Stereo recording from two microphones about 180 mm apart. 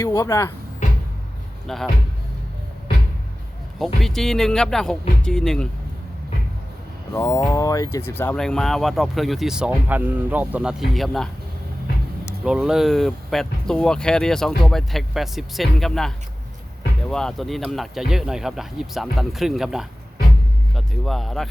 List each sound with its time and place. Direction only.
0.0 s speech: 20° left (ahead or behind)
1.6 s speech: centre (ahead or behind)
4.0 s speech: centre (ahead or behind)
7.1 s speech: 15° left (ahead or behind); by 11.3 s centre (ahead or behind)
12.5 s speech: 5° right (ahead or behind)